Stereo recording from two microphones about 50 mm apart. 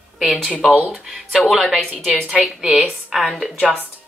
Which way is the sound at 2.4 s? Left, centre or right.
Centre.